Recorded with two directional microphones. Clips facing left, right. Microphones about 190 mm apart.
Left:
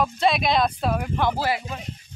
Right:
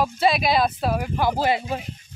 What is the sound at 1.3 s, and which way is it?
Speech, 25° right (ahead or behind).